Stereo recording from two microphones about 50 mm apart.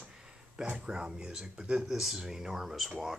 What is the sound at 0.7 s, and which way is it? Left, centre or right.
Speech, centre.